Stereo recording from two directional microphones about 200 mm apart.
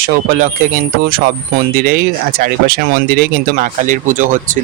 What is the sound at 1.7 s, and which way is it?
Speech, 45° right (ahead or behind).